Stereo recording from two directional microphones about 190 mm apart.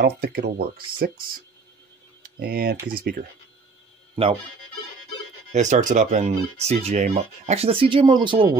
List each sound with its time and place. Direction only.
0.0 s speech: 55° right (ahead or behind)
2.2 s speech: 55° right (ahead or behind)
4.1 s speech: 30° right (ahead or behind)
5.5 s speech: 40° right (ahead or behind)